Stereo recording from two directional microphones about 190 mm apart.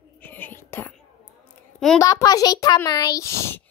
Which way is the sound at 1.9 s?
15° left (ahead or behind).